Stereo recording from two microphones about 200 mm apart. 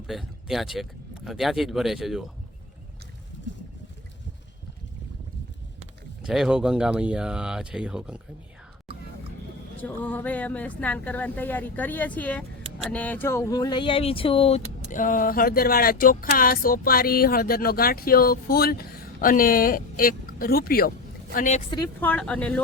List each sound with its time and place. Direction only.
0.1 s speech: centre (ahead or behind)
3.3 s boat: 65° left (ahead or behind)
6.2 s speech: 5° right (ahead or behind)
9.8 s a woman's voice: 10° left (ahead or behind); by 20.9 s 50° left (ahead or behind)
21.3 s speech: 40° left (ahead or behind)
22.0 s a woman's voice: 5° left (ahead or behind)